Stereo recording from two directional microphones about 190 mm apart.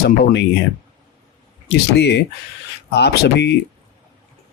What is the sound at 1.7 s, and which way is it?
Speech, 60° left (ahead or behind).